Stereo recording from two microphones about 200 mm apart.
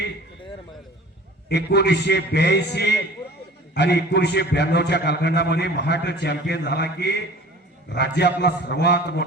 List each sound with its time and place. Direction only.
1.5 s a man's voice: 55° left (ahead or behind)